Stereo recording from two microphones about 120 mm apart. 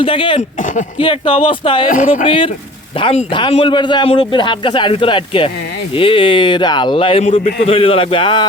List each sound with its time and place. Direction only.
0.0 s speech: 45° left (ahead or behind)
1.9 s speech: 90° left
2.2 s speech: 50° left (ahead or behind)
3.6 s speech: 40° left (ahead or behind)